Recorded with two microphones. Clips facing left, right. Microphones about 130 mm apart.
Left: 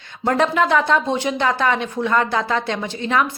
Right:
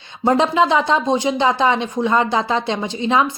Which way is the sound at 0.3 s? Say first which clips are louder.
Right 2 dB; 20° right (ahead or behind).